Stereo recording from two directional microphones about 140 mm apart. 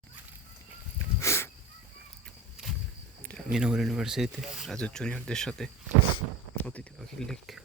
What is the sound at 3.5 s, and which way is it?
Speech, 5° right (ahead or behind).